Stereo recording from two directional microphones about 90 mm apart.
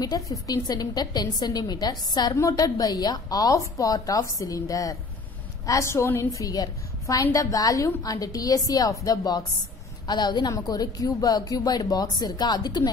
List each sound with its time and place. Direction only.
0.0 s speech: 45° left (ahead or behind)
2.3 s speech: 40° left (ahead or behind)
10.0 s speech: 55° left (ahead or behind)